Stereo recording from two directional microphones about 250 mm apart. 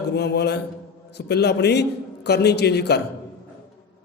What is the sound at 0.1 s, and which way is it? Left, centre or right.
A man's voice, left.